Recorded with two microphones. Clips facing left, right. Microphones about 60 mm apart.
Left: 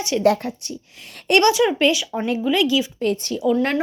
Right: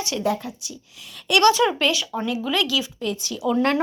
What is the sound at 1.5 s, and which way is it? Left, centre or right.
Speech, centre.